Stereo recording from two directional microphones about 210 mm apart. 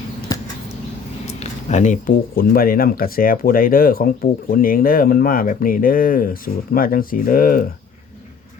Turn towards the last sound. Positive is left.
turn(degrees=40)  # may be behind; listen again after turning